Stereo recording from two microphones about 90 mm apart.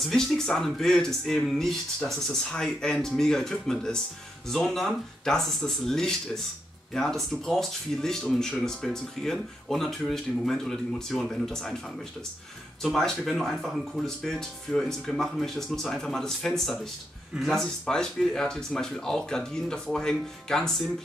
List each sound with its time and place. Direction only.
0.0 s speech: 5° left (ahead or behind)
12.9 s speech: centre (ahead or behind)